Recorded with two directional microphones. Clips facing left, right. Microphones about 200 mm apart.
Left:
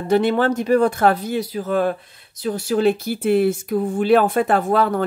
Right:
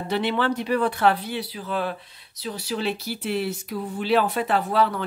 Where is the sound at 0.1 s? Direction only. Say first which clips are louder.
Left 7 dB; 45° left (ahead or behind).